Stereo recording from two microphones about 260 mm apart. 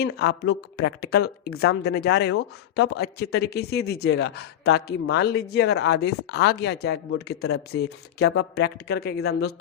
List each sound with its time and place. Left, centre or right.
0.0 s speech: left